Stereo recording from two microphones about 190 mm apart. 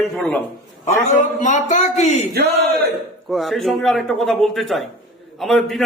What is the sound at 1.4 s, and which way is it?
Speech, 40° left (ahead or behind).